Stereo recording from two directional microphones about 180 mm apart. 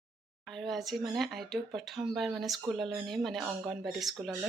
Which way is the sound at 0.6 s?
Centre (ahead or behind).